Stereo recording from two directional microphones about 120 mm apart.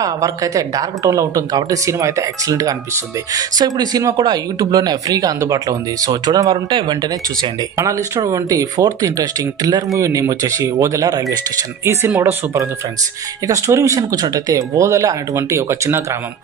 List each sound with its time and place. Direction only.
0.0 s speech: 30° right (ahead or behind)
7.7 s speech: 25° right (ahead or behind)
11.8 s speech: 20° right (ahead or behind)
13.5 s speech: 25° right (ahead or behind)